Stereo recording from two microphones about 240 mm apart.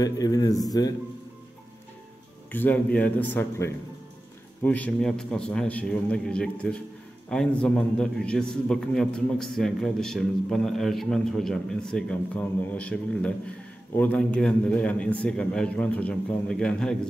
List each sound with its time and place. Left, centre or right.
0.0 s speech: centre
2.5 s a man's voice: centre